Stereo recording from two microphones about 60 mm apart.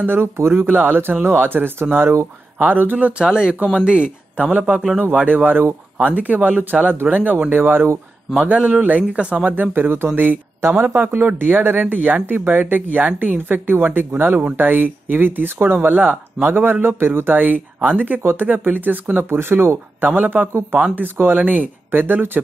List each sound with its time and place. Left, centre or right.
0.1 s speech: right
3.1 s speech: centre; by 7.9 s right
8.4 s speech: right
19.3 s speech: right